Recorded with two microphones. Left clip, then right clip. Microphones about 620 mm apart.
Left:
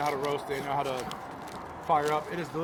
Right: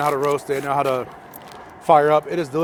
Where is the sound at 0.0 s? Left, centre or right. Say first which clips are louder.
Right 10 dB; right.